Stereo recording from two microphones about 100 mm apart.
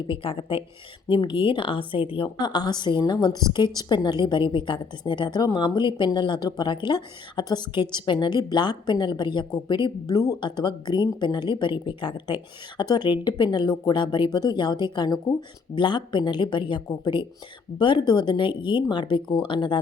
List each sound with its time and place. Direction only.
0.1 s a woman's voice: 60° left (ahead or behind)